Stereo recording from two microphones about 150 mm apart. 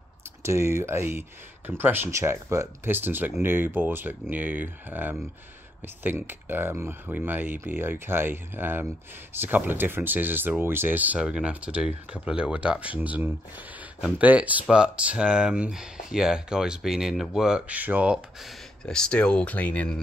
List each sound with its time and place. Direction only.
0.4 s speech: 20° right (ahead or behind); by 20.0 s 10° left (ahead or behind)